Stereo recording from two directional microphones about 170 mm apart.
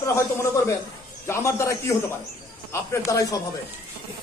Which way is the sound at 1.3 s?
15° left (ahead or behind).